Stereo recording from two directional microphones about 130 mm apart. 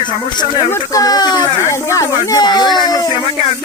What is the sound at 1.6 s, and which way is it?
Speech, 20° left (ahead or behind).